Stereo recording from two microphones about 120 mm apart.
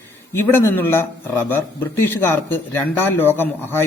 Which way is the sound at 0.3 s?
20° left (ahead or behind).